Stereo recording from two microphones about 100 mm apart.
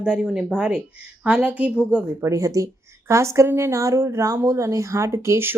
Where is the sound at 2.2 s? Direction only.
35° right (ahead or behind).